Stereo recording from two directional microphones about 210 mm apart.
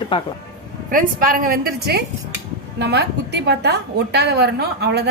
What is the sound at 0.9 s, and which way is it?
A woman's voice, 40° right (ahead or behind).